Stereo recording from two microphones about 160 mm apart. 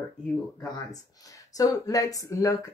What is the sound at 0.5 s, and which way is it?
Speech, 20° left (ahead or behind).